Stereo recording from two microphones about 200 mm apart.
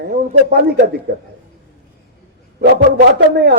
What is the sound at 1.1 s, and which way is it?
Speech, 55° right (ahead or behind).